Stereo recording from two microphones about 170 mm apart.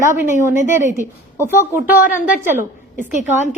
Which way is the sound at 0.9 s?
15° right (ahead or behind).